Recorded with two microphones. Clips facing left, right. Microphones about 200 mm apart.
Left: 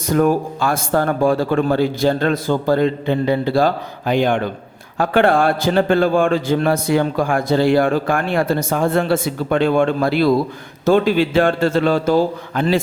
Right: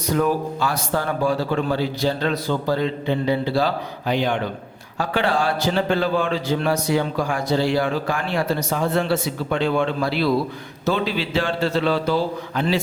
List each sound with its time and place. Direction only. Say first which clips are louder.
0.1 s a man's voice: left 5 dB; 50° left (ahead or behind)